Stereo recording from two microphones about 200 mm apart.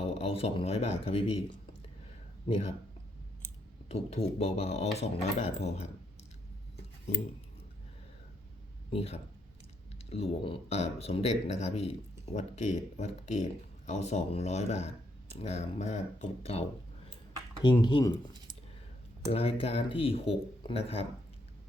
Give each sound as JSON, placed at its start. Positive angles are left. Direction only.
{"t": 0.2, "sound": "speech", "side_deg": 30}
{"t": 3.8, "sound": "speech", "side_deg": 30}
{"t": 8.9, "sound": "speech", "side_deg": 30}
{"t": 17.6, "sound": "speech", "side_deg": 20}
{"t": 19.3, "sound": "speech", "side_deg": 30}